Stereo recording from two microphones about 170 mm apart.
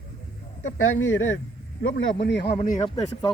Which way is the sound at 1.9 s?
90° left.